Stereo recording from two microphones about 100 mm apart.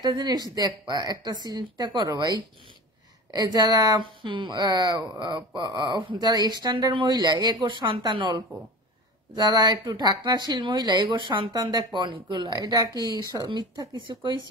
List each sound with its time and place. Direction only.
0.0 s speech: 40° right (ahead or behind)
4.0 s speech: 55° right (ahead or behind)
11.1 s speech: 55° right (ahead or behind)
11.5 s a woman's voice: 40° right (ahead or behind)
11.9 s speech: 55° right (ahead or behind)